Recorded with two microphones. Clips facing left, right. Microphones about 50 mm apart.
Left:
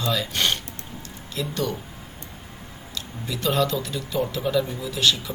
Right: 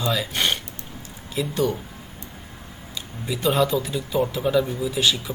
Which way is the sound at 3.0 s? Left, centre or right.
Centre.